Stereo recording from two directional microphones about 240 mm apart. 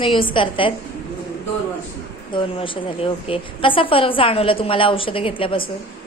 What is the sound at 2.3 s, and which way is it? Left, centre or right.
A woman's voice, left.